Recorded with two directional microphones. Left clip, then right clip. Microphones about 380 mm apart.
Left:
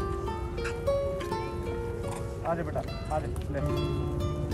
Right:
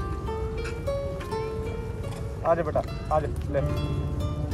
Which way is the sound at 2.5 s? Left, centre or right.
Centre.